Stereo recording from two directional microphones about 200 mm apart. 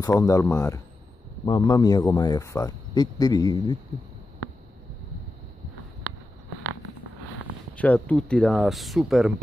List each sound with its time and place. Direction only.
0.2 s speech: 15° left (ahead or behind)
7.7 s speech: 5° left (ahead or behind)